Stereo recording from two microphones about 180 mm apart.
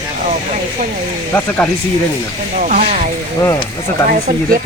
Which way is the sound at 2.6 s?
40° right (ahead or behind).